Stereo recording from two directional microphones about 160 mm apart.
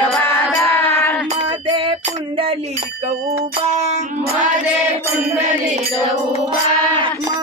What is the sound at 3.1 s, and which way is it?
Female singing, 45° right (ahead or behind).